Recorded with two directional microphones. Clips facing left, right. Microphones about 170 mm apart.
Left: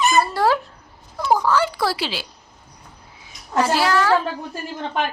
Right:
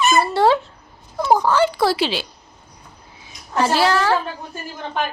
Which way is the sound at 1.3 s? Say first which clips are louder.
Right 2 dB; 25° right (ahead or behind).